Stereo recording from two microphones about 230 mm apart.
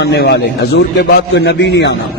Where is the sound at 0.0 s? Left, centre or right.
Left.